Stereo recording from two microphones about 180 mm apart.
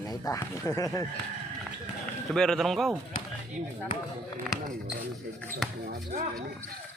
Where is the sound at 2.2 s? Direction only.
5° left (ahead or behind).